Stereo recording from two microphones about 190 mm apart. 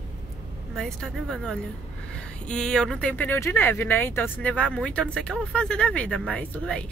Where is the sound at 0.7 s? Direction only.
Centre (ahead or behind).